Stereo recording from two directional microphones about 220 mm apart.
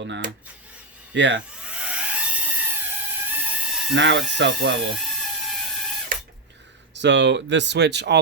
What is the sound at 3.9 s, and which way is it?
Speech, 55° right (ahead or behind).